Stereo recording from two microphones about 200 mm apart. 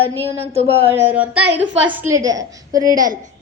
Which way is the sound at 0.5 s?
30° right (ahead or behind).